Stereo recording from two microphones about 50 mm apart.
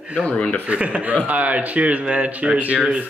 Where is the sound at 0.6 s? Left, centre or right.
Right.